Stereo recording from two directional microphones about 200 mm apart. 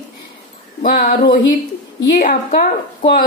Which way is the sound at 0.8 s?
45° left (ahead or behind).